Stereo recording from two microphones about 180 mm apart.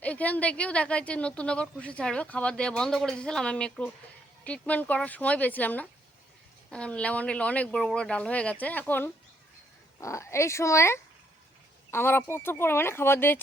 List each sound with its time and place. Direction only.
0.0 s speech: 10° left (ahead or behind)